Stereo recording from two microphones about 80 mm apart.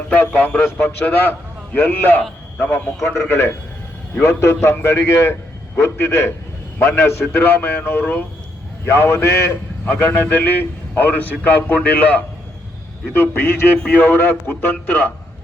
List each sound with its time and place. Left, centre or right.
0.1 s a man's voice: left
9.9 s a man's voice: left